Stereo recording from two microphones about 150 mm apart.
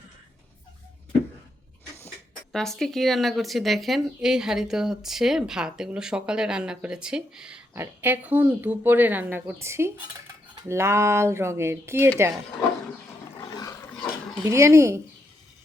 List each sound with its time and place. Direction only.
2.5 s speech: centre (ahead or behind); by 12.3 s 15° right (ahead or behind)
13.4 s dog: 25° left (ahead or behind)
13.9 s dog: 5° left (ahead or behind)
14.4 s speech: 20° right (ahead or behind)